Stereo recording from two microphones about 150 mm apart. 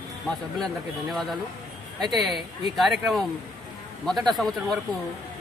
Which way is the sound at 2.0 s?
Centre (ahead or behind).